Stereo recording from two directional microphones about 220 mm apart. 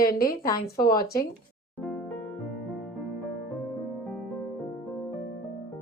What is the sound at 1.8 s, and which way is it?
Music, 5° left (ahead or behind).